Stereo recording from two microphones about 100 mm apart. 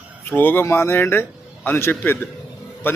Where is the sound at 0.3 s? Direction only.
20° left (ahead or behind).